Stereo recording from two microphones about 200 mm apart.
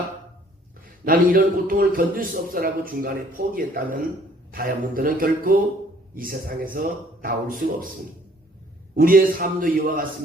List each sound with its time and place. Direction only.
1.0 s a man's voice: 45° right (ahead or behind)
9.0 s a man's voice: 45° right (ahead or behind)